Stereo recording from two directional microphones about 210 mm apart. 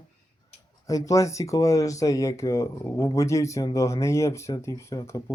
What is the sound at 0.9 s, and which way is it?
Speech, 15° left (ahead or behind).